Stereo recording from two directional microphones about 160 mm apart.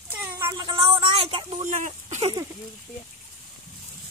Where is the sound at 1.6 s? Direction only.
50° right (ahead or behind).